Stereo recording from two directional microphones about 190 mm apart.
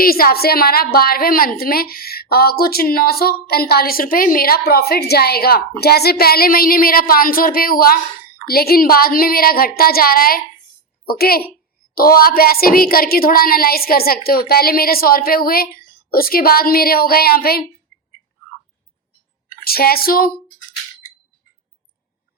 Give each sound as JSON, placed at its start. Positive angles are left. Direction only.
{"t": 0.0, "sound": "a woman's voice", "side_deg": 50}
{"t": 19.6, "sound": "a woman's voice", "side_deg": 55}